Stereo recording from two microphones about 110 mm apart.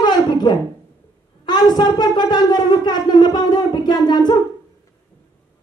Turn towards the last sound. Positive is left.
turn(degrees=40)  # may be behind; listen again after turning